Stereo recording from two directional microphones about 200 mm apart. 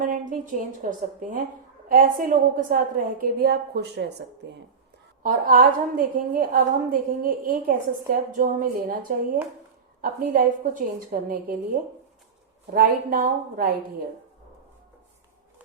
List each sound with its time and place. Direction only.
0.0 s a sound: 40° right (ahead or behind)
0.8 s a woman's voice: 40° right (ahead or behind); by 4.6 s 60° right (ahead or behind)
5.2 s a woman's voice: 45° right (ahead or behind)